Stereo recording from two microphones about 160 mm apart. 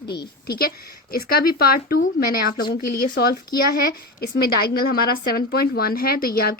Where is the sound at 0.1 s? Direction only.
85° left.